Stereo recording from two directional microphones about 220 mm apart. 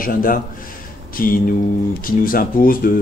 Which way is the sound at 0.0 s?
40° left (ahead or behind).